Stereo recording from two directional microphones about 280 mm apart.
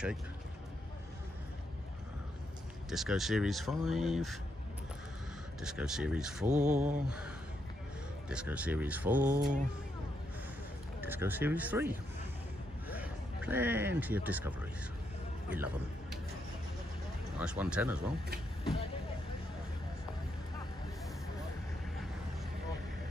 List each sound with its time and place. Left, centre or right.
2.9 s speech: centre
5.6 s speech: centre
9.3 s speech: right
11.0 s speech: centre
15.5 s speech: centre
17.4 s speech: centre